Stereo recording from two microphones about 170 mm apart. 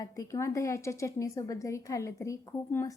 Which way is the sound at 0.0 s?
20° left (ahead or behind).